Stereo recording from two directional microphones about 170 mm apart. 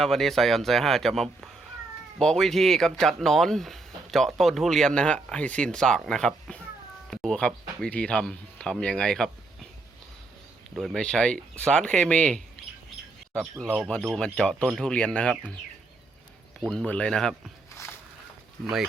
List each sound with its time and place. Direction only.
0.0 s speech: centre (ahead or behind)
10.8 s speech: centre (ahead or behind)
16.6 s speech: 5° left (ahead or behind)
18.6 s speech: centre (ahead or behind)